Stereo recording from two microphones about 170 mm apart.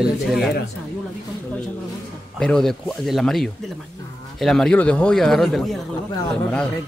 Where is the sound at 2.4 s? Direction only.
5° left (ahead or behind).